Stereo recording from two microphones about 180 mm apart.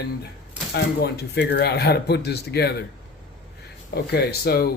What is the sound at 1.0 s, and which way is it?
Speech, 70° left (ahead or behind).